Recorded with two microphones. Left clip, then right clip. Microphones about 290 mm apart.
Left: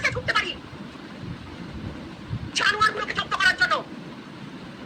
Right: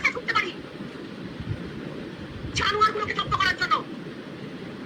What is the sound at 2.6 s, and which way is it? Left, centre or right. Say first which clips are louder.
Vehicle: left 1 dB; centre.